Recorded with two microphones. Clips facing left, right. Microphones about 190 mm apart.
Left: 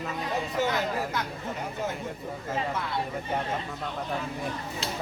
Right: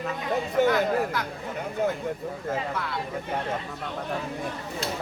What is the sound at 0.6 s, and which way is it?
Speech, 55° right (ahead or behind).